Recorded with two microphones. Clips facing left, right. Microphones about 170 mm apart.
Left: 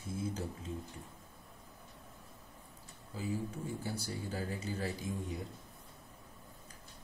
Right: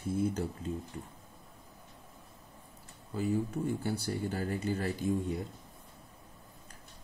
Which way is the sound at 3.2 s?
65° right (ahead or behind).